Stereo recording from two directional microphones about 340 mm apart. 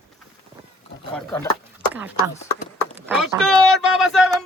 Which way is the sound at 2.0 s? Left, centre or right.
Centre.